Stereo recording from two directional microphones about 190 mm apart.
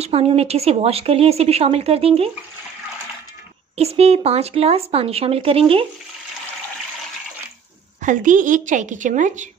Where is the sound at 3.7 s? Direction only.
30° right (ahead or behind).